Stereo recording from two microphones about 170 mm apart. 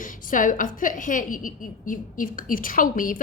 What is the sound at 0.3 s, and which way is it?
A woman's voice, 50° left (ahead or behind).